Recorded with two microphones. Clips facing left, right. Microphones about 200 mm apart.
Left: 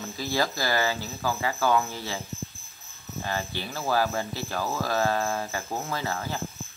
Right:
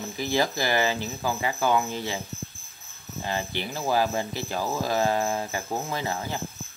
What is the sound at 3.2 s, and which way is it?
Cricket, 20° right (ahead or behind).